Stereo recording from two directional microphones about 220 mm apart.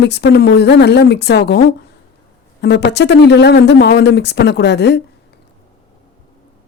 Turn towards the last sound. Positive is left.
turn(degrees=50)  # may be behind; listen again after turning